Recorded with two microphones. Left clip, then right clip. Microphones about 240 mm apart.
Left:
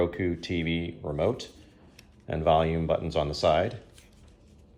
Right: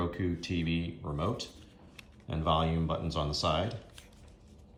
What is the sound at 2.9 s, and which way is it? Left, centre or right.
Speech, centre.